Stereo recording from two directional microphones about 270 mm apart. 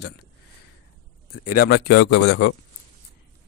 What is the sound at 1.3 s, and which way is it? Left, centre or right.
Speech, left.